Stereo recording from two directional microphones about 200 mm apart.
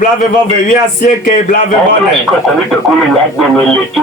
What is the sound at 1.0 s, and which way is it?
Speech, 40° left (ahead or behind).